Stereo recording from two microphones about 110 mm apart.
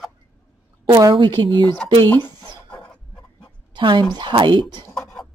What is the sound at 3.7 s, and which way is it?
Speech, 45° right (ahead or behind).